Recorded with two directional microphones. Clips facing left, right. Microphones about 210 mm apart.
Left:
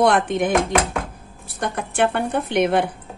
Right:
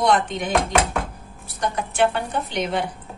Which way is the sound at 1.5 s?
55° left (ahead or behind).